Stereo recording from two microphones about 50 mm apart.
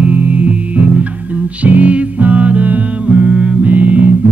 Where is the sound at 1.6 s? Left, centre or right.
Right.